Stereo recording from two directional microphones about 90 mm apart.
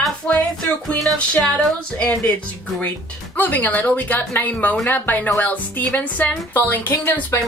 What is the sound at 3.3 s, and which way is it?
Speech, 20° left (ahead or behind).